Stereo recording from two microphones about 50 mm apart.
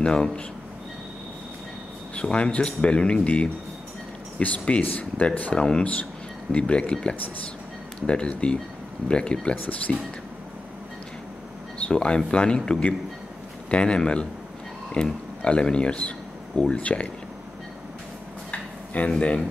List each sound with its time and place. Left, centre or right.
0.0 s speech: centre
2.1 s speech: left
9.6 s speech: left
11.9 s speech: centre
18.9 s speech: left